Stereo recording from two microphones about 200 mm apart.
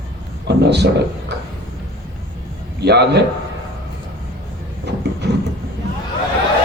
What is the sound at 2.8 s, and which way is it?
Speech, 55° right (ahead or behind).